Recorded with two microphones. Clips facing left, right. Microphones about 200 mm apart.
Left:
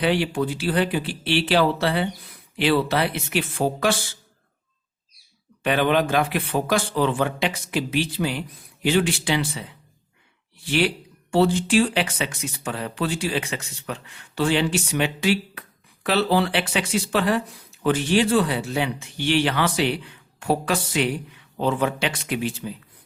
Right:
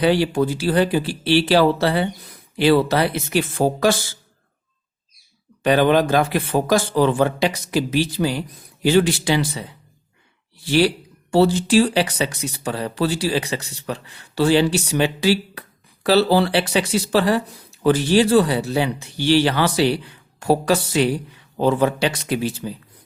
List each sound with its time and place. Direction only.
0.0 s speech: 40° right (ahead or behind)
5.6 s speech: 40° right (ahead or behind)
10.7 s speech: 40° right (ahead or behind)